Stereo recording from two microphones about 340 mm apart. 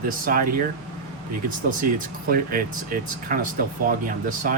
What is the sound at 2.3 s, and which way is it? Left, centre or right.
Speech, right.